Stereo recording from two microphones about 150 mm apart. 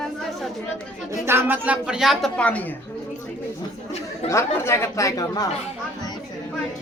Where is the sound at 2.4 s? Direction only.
10° left (ahead or behind).